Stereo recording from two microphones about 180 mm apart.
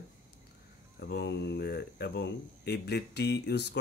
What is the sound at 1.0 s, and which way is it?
Speech, 65° left (ahead or behind).